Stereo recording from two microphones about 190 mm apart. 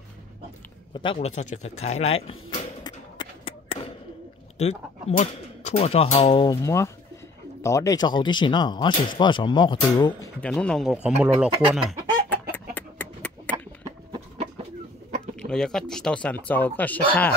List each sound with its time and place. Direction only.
1.0 s a sound: 35° left (ahead or behind)
4.6 s speech: 35° left (ahead or behind); by 10.3 s 20° left (ahead or behind)
10.4 s speech: 5° left (ahead or behind)
12.3 s chicken: 10° left (ahead or behind)
15.3 s speech: 5° left (ahead or behind)